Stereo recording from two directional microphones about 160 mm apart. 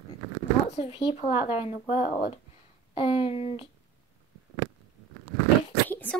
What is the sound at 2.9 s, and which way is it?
Speech, 35° left (ahead or behind).